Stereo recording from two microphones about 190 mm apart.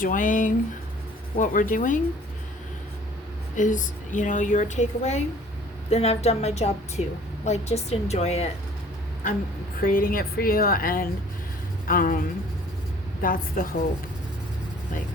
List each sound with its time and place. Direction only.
0.0 s speech: 45° left (ahead or behind)
3.6 s a woman's voice: 40° left (ahead or behind)
9.8 s speech: 50° left (ahead or behind)
13.2 s speech: 45° left (ahead or behind)